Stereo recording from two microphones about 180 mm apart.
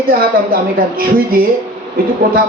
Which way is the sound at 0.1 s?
55° right (ahead or behind).